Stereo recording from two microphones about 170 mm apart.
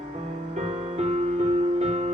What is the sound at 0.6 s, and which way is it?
Music, 40° right (ahead or behind).